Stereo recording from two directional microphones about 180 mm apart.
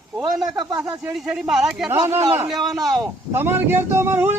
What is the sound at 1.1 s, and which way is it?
Speech, centre (ahead or behind).